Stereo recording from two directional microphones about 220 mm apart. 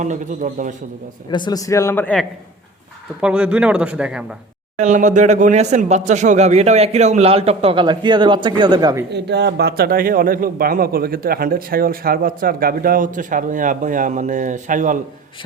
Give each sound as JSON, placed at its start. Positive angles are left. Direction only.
{"t": 0.0, "sound": "a man's voice", "side_deg": -35}
{"t": 1.3, "sound": "a man's voice", "side_deg": 20}
{"t": 3.2, "sound": "speech", "side_deg": -5}
{"t": 4.8, "sound": "speech", "side_deg": -35}
{"t": 9.0, "sound": "a man's voice", "side_deg": -50}